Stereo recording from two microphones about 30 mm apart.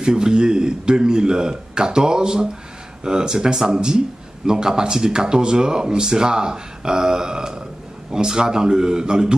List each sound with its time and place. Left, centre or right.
0.0 s speech: right